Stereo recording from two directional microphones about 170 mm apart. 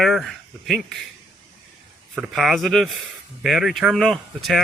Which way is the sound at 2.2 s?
Centre (ahead or behind).